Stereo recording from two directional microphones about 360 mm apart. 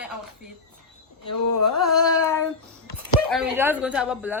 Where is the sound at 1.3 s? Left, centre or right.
Left.